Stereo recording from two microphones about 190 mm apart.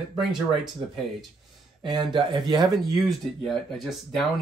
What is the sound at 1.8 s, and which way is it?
Speech, 25° right (ahead or behind).